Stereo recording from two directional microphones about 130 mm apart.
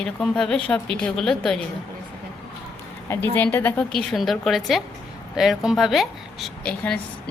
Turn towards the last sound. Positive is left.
turn(degrees=5)  # may be behind; listen again after turning